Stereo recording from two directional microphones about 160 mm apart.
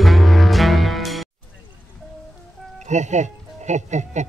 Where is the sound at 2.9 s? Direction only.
45° right (ahead or behind).